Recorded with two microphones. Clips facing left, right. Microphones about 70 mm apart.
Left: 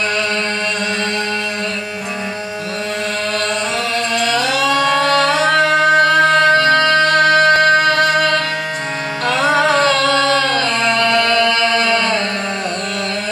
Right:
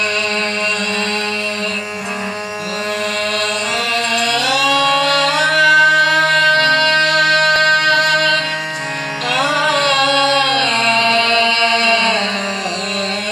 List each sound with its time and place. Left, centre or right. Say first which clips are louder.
4.1 s singing: left 1 dB; left
9.3 s music: left 2 dB; left